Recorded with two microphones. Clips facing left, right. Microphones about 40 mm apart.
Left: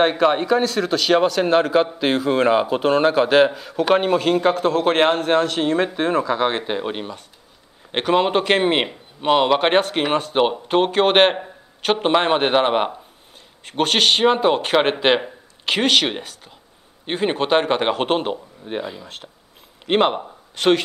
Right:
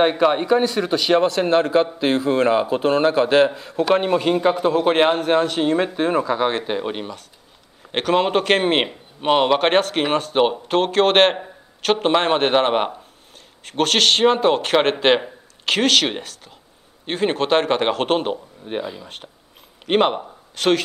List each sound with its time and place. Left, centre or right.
0.0 s a man's voice: centre
4.5 s a man's voice: centre
5.6 s a man's voice: centre
6.6 s a man's voice: centre
8.6 s speech: centre
9.6 s a man's voice: centre
10.3 s a man's voice: centre
13.7 s a man's voice: centre
20.5 s speech: centre